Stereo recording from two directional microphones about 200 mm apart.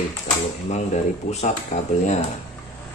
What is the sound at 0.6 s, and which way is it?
Speech, 35° left (ahead or behind).